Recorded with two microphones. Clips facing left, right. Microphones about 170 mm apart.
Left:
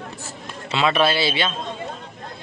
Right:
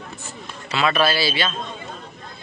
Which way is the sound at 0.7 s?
25° left (ahead or behind).